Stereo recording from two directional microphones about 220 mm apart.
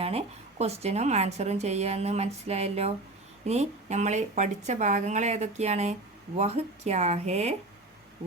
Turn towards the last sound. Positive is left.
turn(degrees=-30)  # may be behind; listen again after turning